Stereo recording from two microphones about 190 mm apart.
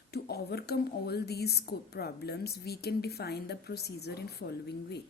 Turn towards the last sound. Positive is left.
turn(degrees=60)  # may be behind; listen again after turning